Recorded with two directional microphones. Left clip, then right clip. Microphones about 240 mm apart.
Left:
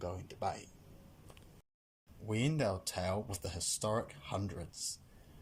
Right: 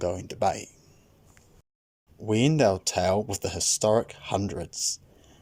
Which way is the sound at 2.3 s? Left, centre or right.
Right.